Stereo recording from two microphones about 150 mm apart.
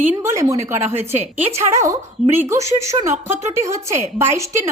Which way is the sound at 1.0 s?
15° right (ahead or behind).